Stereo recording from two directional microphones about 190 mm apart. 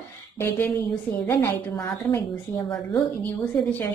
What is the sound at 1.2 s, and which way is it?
A woman's voice, 10° left (ahead or behind).